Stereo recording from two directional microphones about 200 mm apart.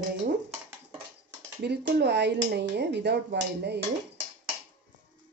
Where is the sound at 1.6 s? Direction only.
55° right (ahead or behind).